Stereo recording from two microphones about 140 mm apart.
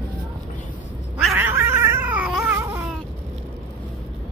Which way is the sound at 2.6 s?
20° right (ahead or behind).